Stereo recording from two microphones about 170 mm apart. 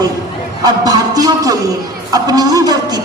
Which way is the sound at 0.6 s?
20° right (ahead or behind).